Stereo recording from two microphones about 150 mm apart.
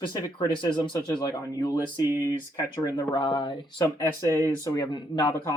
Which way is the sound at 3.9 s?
20° left (ahead or behind).